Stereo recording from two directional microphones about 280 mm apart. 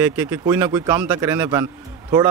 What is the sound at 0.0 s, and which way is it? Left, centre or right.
Speech, centre.